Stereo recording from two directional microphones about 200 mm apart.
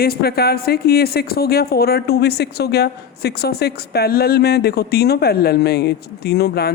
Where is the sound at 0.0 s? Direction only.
50° left (ahead or behind).